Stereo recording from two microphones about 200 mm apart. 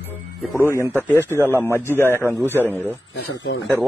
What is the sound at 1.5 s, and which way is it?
Speech, 10° left (ahead or behind).